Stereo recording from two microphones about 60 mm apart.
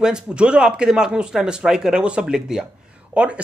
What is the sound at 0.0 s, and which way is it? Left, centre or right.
Speech, centre.